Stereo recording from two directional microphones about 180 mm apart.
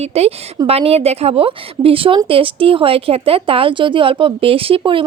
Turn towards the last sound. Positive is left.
turn(degrees=-30)  # may be behind; listen again after turning